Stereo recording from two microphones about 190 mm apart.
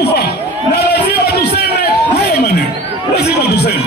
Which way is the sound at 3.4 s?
60° left (ahead or behind).